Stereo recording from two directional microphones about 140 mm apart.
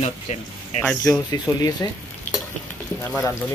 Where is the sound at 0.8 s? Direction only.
5° left (ahead or behind).